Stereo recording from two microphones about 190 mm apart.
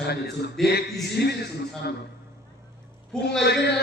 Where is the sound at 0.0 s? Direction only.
60° left (ahead or behind).